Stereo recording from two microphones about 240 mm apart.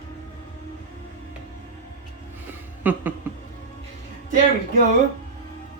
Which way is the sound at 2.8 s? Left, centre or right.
Centre.